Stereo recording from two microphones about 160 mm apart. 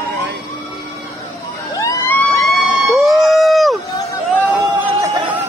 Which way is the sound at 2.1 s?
10° left (ahead or behind).